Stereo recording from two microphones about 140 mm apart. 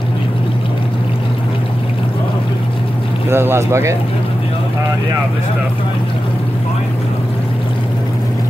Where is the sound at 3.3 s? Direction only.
15° right (ahead or behind).